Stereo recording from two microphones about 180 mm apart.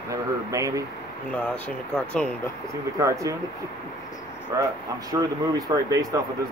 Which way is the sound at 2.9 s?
15° right (ahead or behind).